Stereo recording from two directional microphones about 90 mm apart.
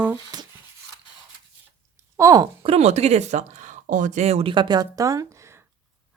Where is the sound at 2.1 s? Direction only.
40° right (ahead or behind).